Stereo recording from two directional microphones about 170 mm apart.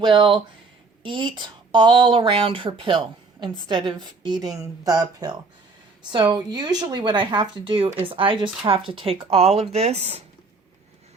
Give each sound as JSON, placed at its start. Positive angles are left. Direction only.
{"t": 0.0, "sound": "speech", "side_deg": -30}